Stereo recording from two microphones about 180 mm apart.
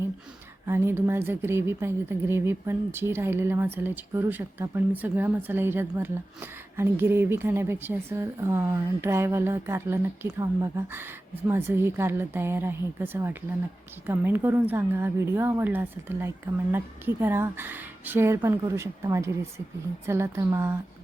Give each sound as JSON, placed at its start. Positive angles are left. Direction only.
{"t": 0.7, "sound": "speech", "side_deg": -15}